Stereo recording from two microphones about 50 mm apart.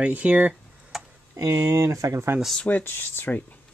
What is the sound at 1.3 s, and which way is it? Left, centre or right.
Speech, right.